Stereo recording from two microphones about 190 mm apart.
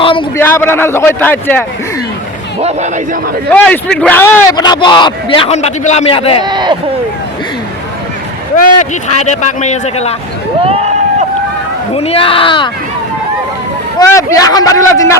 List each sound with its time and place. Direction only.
0.0 s a sound: 25° left (ahead or behind)
0.3 s a man's voice: 10° left (ahead or behind)
2.6 s a man's voice: 35° right (ahead or behind)
3.5 s a man's voice: 5° left (ahead or behind); by 6.4 s 30° left (ahead or behind)
6.4 s speech: 25° right (ahead or behind)
8.5 s a man's voice: 40° left (ahead or behind)
10.7 s a sound: 35° right (ahead or behind)
11.9 s a man's voice: 30° left (ahead or behind)
14.1 s a man's voice: 15° left (ahead or behind)